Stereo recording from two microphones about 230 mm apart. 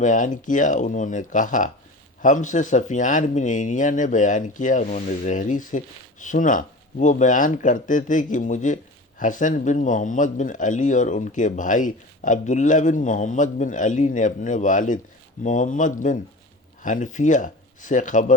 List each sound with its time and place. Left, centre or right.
0.0 s speech: left